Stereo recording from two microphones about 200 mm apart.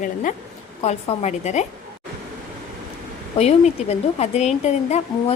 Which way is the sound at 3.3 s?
35° left (ahead or behind).